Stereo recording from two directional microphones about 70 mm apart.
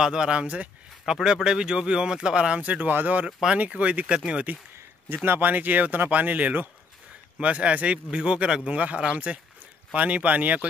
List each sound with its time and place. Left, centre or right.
0.0 s speech: centre
3.3 s speech: centre
3.5 s speech: centre
5.1 s speech: right